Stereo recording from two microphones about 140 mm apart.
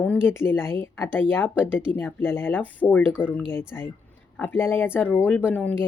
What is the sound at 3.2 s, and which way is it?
Speech, 35° left (ahead or behind).